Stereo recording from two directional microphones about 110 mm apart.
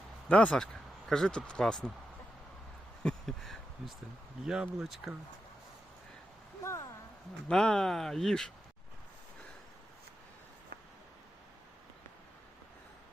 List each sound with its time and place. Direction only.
0.3 s speech: 10° left (ahead or behind)
3.0 s speech: 5° left (ahead or behind)
6.6 s a sound: 25° left (ahead or behind)
7.4 s speech: 5° left (ahead or behind)